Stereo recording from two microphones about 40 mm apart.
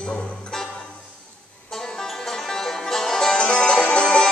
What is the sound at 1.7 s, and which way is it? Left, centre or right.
Music, centre.